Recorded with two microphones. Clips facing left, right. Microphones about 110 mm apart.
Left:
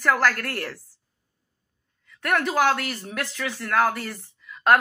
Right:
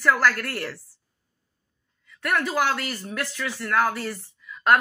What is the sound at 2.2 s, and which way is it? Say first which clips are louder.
A woman's voice: left 2 dB; 55° left (ahead or behind).